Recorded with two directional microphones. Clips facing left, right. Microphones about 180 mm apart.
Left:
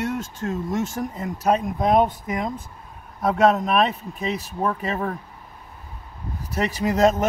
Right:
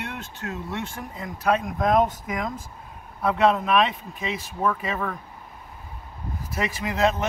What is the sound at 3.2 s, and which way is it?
Speech, 45° left (ahead or behind).